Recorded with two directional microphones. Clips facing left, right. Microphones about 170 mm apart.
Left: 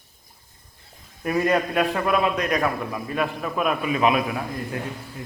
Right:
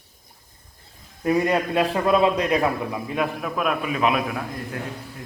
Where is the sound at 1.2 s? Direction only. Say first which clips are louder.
Right 1 dB; 20° right (ahead or behind).